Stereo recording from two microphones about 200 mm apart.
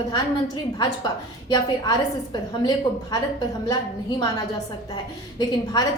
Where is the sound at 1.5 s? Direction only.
20° left (ahead or behind).